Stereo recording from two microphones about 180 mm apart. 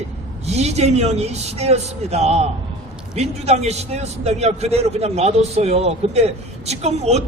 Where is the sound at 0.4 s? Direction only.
35° right (ahead or behind).